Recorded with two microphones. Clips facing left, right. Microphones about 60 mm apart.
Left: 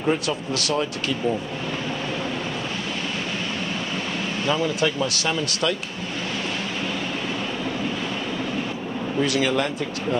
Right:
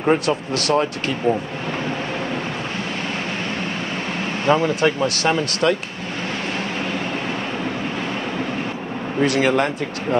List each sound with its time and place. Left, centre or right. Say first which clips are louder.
0.0 s speech: right 5 dB; right
4.5 s speech: right 6 dB; right
9.2 s speech: right 5 dB; right